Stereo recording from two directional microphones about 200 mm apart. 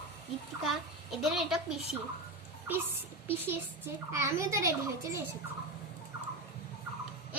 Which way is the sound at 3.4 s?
10° right (ahead or behind).